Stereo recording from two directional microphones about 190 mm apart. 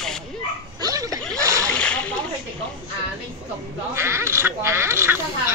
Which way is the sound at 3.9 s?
15° right (ahead or behind).